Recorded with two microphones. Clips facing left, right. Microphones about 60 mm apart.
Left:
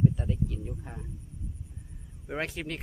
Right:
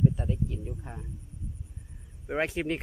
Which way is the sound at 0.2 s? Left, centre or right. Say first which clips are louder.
Even; centre.